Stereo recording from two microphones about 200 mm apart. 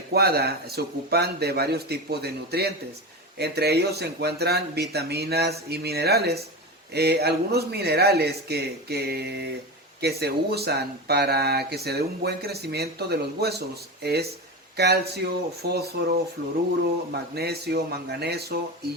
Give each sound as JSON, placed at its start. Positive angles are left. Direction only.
{"t": 0.1, "sound": "speech", "side_deg": -50}